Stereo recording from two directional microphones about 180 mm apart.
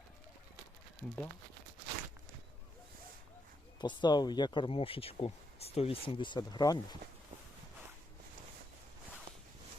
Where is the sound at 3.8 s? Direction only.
25° left (ahead or behind).